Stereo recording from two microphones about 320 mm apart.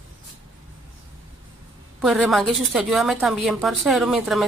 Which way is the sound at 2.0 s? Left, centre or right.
Centre.